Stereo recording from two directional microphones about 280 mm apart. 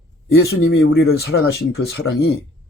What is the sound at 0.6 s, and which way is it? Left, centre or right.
Speech, left.